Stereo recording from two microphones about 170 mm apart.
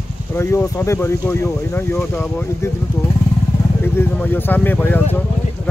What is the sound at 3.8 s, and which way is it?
Speech, 10° left (ahead or behind).